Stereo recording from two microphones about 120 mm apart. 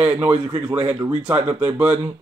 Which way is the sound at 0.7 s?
15° right (ahead or behind).